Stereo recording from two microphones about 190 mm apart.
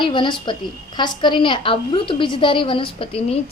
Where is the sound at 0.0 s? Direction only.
25° left (ahead or behind).